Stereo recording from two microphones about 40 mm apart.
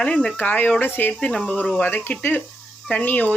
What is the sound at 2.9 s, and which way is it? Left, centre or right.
Speech, left.